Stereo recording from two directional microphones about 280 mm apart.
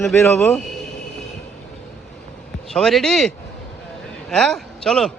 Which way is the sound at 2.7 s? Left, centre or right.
Centre.